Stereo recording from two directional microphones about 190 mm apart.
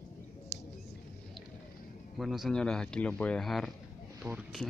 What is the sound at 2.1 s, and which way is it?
Speech, centre (ahead or behind).